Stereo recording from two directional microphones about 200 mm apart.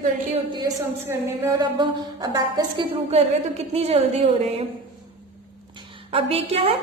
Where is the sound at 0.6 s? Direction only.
15° right (ahead or behind); by 4.6 s 30° right (ahead or behind).